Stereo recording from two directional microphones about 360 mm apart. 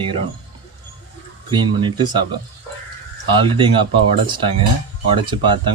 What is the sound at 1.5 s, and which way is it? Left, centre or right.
Speech, centre.